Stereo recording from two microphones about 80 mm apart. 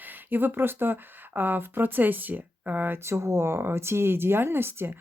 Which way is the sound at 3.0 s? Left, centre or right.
Right.